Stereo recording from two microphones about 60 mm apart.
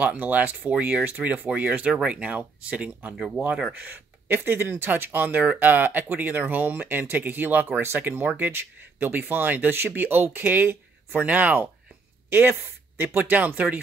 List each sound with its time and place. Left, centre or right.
0.0 s speech: right
3.2 s speech: centre
3.7 s speech: right
8.1 s speech: right
12.3 s speech: right